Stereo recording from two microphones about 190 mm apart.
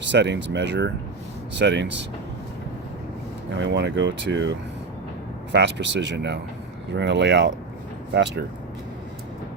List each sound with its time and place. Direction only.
0.0 s speech: 65° right (ahead or behind)
3.5 s speech: 70° right (ahead or behind)